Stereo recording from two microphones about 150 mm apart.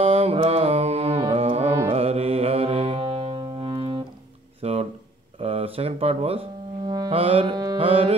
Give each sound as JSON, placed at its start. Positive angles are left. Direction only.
{"t": 0.0, "sound": "carnatic music", "side_deg": -40}
{"t": 1.9, "sound": "music", "side_deg": -45}
{"t": 4.6, "sound": "guitar", "side_deg": -40}
{"t": 5.4, "sound": "speech", "side_deg": -40}
{"t": 7.1, "sound": "music", "side_deg": -40}